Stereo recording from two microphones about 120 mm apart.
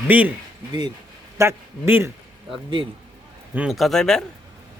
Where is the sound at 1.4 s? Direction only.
20° right (ahead or behind).